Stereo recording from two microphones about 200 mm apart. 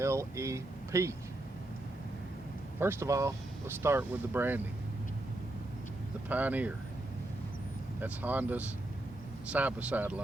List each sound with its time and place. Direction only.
0.0 s speech: 15° right (ahead or behind)
2.8 s speech: 15° right (ahead or behind)
6.2 s speech: 10° right (ahead or behind)
8.0 s speech: 10° right (ahead or behind)